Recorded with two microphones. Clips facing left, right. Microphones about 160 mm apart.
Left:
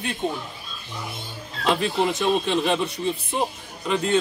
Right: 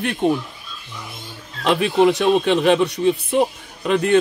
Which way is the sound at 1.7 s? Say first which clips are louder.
Right 6 dB; 70° right (ahead or behind).